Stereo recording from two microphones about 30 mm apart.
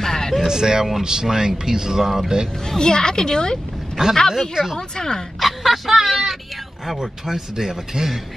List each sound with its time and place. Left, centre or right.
0.0 s a sound: centre
0.4 s speech: centre
2.6 s a woman's voice: left
4.3 s speech: centre
4.7 s a woman's voice: left
5.4 s a sound: centre
6.9 s speech: centre